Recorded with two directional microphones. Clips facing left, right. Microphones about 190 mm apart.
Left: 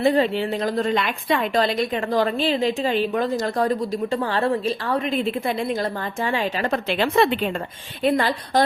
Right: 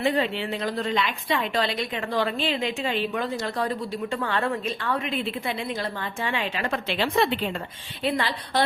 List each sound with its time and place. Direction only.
0.0 s a woman's voice: 40° left (ahead or behind)